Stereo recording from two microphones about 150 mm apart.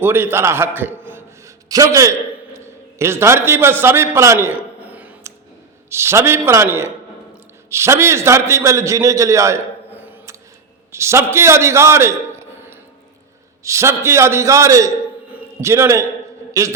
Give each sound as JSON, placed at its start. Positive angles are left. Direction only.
{"t": 0.0, "sound": "a man's voice", "side_deg": -15}
{"t": 15.3, "sound": "a sound", "side_deg": -15}
{"t": 16.5, "sound": "a man's voice", "side_deg": -20}